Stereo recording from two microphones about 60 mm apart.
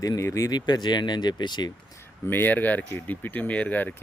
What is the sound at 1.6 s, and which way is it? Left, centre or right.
Speech, left.